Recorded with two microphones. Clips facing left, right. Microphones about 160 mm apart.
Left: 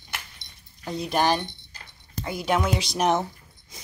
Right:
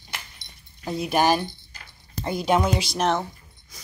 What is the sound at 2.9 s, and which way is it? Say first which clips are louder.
Speech: left 3 dB; 15° left (ahead or behind).